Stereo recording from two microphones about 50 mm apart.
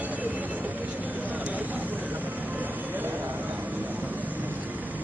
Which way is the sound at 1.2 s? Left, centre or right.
Right.